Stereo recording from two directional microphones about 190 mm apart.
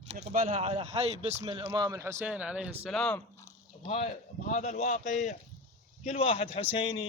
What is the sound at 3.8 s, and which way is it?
A man's voice, 30° left (ahead or behind).